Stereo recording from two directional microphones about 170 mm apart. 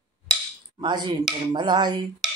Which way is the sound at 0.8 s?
25° right (ahead or behind).